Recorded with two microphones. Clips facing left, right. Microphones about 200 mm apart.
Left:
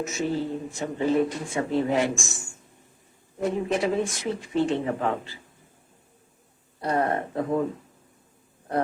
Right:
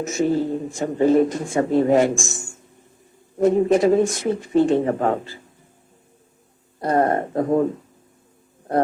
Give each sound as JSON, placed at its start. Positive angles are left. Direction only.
{"t": 0.0, "sound": "speech", "side_deg": -45}
{"t": 6.8, "sound": "speech", "side_deg": -45}